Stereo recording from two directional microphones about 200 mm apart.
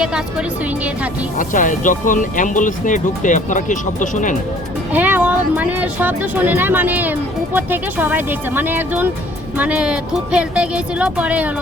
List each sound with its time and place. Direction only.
0.0 s a woman's voice: 5° right (ahead or behind)
1.4 s speech: 40° left (ahead or behind)
4.9 s speech: 10° right (ahead or behind)